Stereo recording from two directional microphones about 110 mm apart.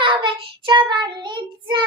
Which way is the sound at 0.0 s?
50° right (ahead or behind).